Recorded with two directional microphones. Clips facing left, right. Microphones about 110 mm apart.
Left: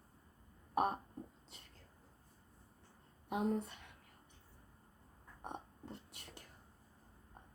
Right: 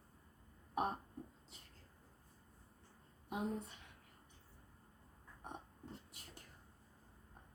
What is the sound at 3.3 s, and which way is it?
Speech, 55° left (ahead or behind).